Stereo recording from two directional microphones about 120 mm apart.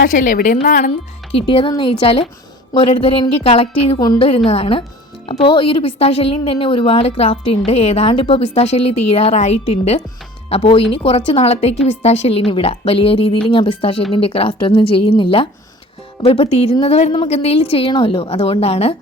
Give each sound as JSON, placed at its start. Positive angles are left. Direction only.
{"t": 0.0, "sound": "a woman's voice", "side_deg": 90}
{"t": 1.3, "sound": "a woman's voice", "side_deg": 45}
{"t": 12.5, "sound": "a woman's voice", "side_deg": 50}